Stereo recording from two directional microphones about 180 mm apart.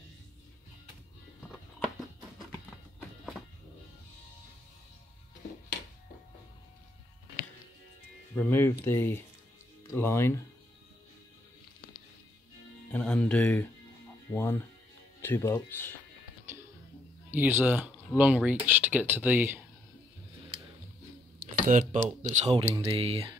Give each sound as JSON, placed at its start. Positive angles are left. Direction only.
{"t": 8.4, "sound": "speech", "side_deg": 10}
{"t": 12.9, "sound": "speech", "side_deg": 5}
{"t": 17.3, "sound": "speech", "side_deg": -10}
{"t": 21.4, "sound": "a sound", "side_deg": -45}
{"t": 22.3, "sound": "speech", "side_deg": -35}